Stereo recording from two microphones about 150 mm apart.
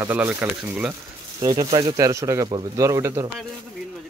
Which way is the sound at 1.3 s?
30° right (ahead or behind).